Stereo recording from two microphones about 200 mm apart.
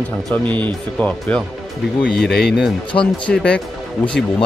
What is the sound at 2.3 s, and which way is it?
Speech, 55° left (ahead or behind).